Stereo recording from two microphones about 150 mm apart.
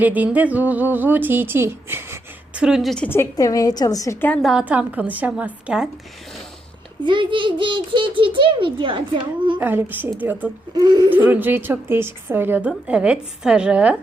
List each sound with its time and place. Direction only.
0.0 s a woman's voice: 10° right (ahead or behind)
2.6 s a woman's voice: 5° right (ahead or behind)
3.1 s a woman's voice: 20° left (ahead or behind)
4.4 s a woman's voice: 5° right (ahead or behind)
7.0 s a child's voice: 35° right (ahead or behind)
9.6 s a woman's voice: 15° right (ahead or behind)
10.8 s speech: 30° right (ahead or behind)
11.1 s a woman's voice: 10° right (ahead or behind)